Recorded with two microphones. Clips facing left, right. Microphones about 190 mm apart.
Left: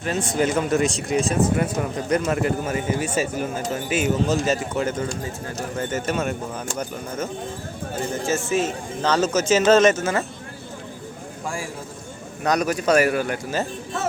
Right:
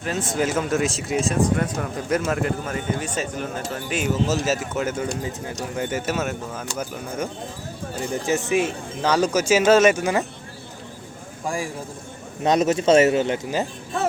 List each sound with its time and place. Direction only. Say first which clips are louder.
0.0 s speech: left 2 dB; centre (ahead or behind)
5.2 s speech: even; 15° right (ahead or behind)
8.1 s speech: right 2 dB; 15° right (ahead or behind)
12.4 s speech: right 3 dB; 25° right (ahead or behind)